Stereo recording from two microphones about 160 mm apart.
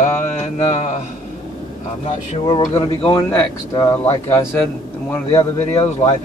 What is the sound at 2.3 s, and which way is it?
Speech, 30° left (ahead or behind).